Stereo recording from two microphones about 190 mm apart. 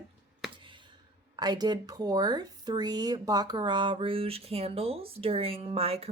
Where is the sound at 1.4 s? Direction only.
20° right (ahead or behind).